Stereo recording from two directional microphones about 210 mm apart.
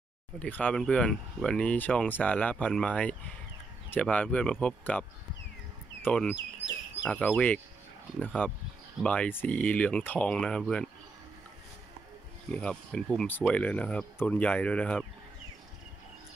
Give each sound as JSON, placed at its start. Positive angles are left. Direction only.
{"t": 0.4, "sound": "speech", "side_deg": 5}
{"t": 6.0, "sound": "speech", "side_deg": 5}
{"t": 12.4, "sound": "speech", "side_deg": 5}